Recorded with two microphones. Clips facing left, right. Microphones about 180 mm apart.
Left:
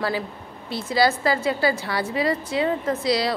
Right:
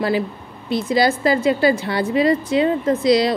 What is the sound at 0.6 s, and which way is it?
A woman's voice, 20° right (ahead or behind).